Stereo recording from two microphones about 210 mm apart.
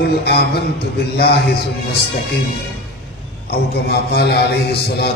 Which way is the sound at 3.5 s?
50° left (ahead or behind).